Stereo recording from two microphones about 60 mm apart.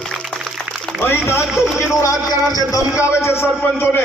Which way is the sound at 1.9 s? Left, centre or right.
Left.